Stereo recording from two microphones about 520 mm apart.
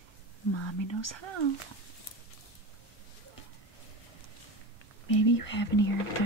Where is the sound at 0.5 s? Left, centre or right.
Left.